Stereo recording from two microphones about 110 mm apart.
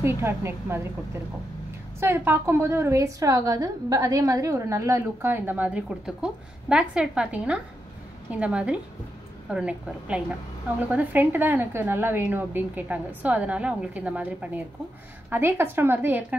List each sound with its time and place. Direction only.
0.0 s a woman's voice: 25° right (ahead or behind)
2.0 s a woman's voice: 20° right (ahead or behind)